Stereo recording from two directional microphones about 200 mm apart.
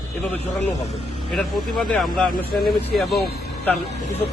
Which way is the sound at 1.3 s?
Centre (ahead or behind).